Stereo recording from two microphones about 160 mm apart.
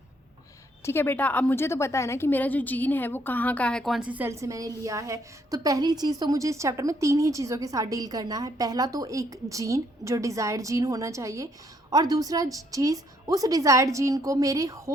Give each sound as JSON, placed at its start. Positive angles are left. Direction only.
{"t": 0.9, "sound": "a woman's voice", "side_deg": 15}